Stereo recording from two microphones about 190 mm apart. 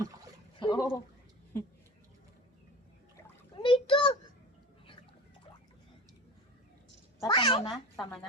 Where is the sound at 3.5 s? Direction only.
25° left (ahead or behind).